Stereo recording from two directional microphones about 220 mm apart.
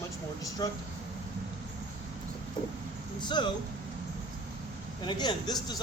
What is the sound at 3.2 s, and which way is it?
Speech, 20° left (ahead or behind).